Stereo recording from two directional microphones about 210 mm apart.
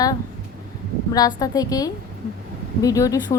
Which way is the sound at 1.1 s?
15° left (ahead or behind).